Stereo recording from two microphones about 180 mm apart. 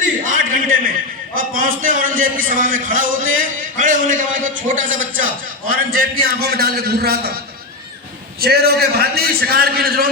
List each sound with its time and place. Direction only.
0.3 s a sound: 50° right (ahead or behind)
1.4 s a man's voice: 50° right (ahead or behind)
8.4 s a man's voice: 60° right (ahead or behind)